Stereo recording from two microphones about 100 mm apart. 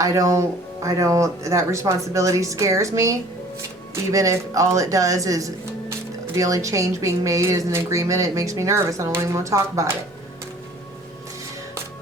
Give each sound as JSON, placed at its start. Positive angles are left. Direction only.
{"t": 0.0, "sound": "speech", "side_deg": -35}